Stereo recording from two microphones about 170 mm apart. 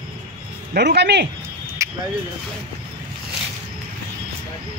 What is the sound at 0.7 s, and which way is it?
Speech, 80° right.